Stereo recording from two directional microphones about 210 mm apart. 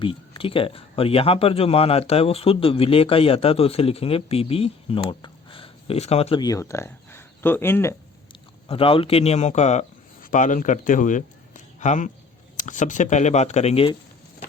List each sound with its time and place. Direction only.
0.0 s speech: 25° left (ahead or behind)
8.3 s speech: 25° left (ahead or behind)